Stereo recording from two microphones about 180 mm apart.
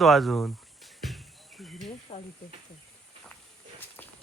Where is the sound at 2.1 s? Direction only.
35° left (ahead or behind).